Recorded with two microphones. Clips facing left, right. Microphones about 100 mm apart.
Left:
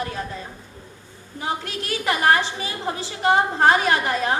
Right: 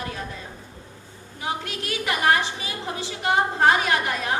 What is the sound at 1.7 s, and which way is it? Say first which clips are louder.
A woman's voice: left 3 dB; 35° left (ahead or behind).